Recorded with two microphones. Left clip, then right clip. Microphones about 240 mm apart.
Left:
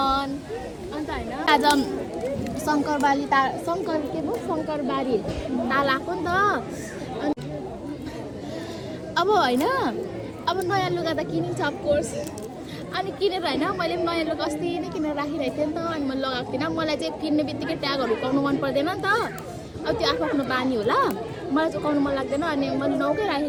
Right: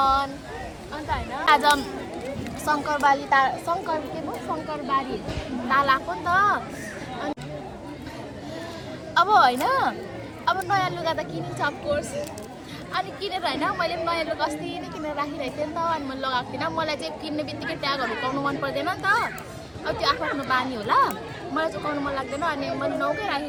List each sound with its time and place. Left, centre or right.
0.0 s a sound: centre
2.6 s a woman's voice: centre
9.1 s a woman's voice: centre